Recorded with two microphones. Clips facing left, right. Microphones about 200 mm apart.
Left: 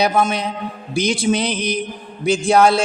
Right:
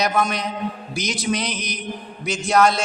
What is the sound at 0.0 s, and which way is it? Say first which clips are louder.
A man's voice: left 4 dB; 30° left (ahead or behind).